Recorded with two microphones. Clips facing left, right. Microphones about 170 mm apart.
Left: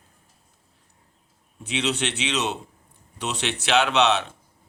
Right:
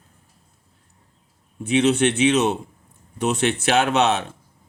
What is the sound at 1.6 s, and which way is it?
Speech, 50° right (ahead or behind).